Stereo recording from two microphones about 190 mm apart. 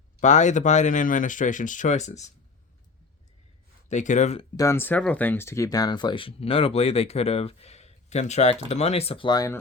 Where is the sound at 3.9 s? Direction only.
40° left (ahead or behind).